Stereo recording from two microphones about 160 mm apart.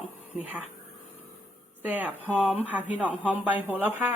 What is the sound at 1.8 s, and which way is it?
Speech, 10° right (ahead or behind).